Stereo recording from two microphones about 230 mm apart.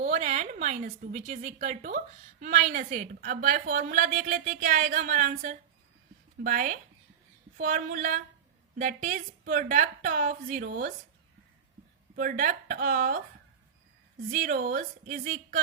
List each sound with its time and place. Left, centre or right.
0.0 s a woman's voice: right
12.1 s a woman's voice: right
14.3 s a woman's voice: right